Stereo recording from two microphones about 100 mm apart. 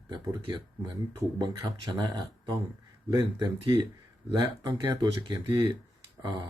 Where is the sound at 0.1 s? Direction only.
45° right (ahead or behind).